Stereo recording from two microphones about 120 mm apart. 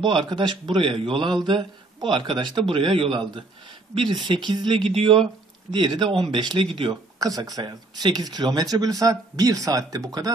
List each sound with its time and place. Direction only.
0.0 s a man's voice: 40° right (ahead or behind)
7.2 s speech: 30° right (ahead or behind)